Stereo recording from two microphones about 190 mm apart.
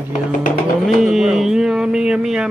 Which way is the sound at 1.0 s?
Centre (ahead or behind).